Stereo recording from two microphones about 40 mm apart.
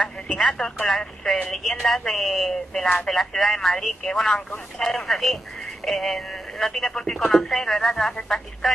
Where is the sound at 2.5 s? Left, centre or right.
Centre.